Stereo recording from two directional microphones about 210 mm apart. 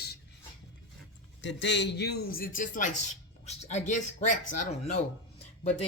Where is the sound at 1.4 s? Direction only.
60° left (ahead or behind).